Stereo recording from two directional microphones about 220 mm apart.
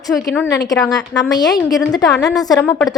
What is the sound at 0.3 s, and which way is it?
A woman's voice, 10° left (ahead or behind).